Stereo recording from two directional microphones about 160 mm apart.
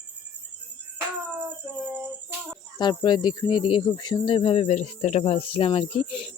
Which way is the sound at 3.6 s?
30° left (ahead or behind).